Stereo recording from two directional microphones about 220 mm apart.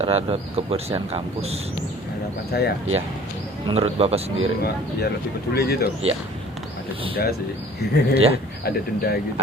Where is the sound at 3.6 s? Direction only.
25° right (ahead or behind).